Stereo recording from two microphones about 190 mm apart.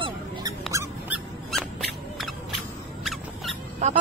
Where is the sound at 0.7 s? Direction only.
15° right (ahead or behind).